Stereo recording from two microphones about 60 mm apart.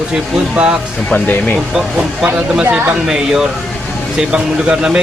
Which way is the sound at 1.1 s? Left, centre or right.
Left.